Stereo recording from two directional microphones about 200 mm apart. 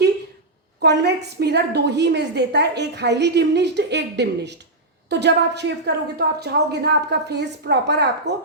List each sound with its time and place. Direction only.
0.8 s a woman's voice: 55° right (ahead or behind)